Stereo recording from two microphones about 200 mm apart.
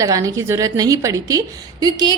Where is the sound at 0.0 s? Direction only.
15° right (ahead or behind).